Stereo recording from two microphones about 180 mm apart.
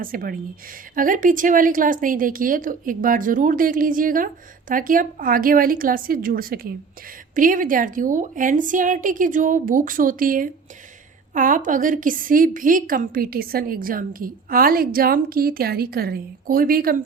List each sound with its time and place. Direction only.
0.0 s a woman's voice: 50° right (ahead or behind)